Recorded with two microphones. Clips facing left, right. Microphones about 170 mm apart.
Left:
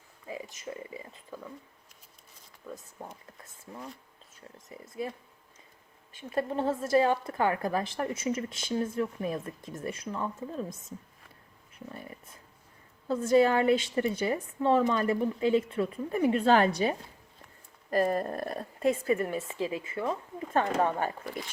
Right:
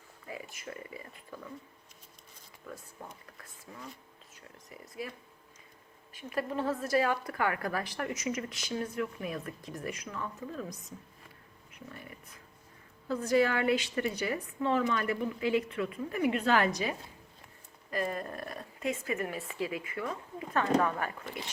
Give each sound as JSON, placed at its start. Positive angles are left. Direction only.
{"t": 0.3, "sound": "speech", "side_deg": 20}
{"t": 2.6, "sound": "speech", "side_deg": 20}
{"t": 4.5, "sound": "speech", "side_deg": 25}
{"t": 6.1, "sound": "speech", "side_deg": 30}